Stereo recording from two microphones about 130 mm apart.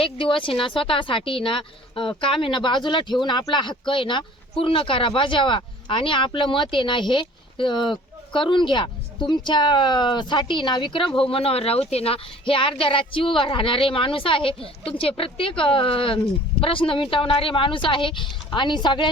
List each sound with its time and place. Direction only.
0.0 s a woman's voice: 40° left (ahead or behind)